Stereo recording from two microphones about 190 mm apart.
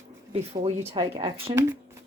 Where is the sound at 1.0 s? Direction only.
25° right (ahead or behind).